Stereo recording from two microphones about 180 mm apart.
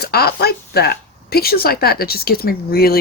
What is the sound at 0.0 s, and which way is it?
Speech, 60° left (ahead or behind).